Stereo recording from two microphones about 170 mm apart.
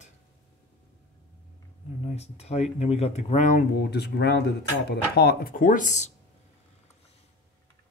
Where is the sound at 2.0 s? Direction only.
40° left (ahead or behind).